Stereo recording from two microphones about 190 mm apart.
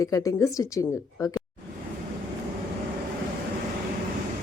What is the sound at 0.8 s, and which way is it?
Speech, 15° left (ahead or behind).